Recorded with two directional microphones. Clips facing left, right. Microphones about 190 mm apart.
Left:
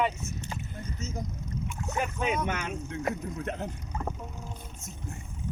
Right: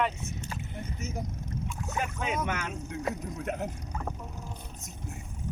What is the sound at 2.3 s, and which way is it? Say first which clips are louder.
A man's voice: left 1 dB; centre (ahead or behind).